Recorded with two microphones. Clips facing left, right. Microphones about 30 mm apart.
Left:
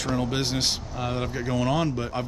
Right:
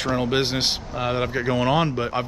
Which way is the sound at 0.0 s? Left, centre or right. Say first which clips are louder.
Right 4 dB; right.